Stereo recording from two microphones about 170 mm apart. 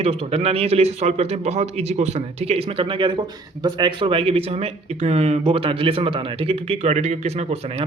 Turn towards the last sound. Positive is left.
turn(degrees=-40)  # may be behind; listen again after turning